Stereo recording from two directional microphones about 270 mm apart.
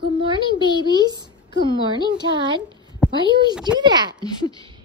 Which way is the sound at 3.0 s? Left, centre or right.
Centre.